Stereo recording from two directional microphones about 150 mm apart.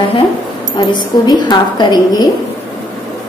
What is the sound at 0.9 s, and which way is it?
A woman's voice, 30° left (ahead or behind).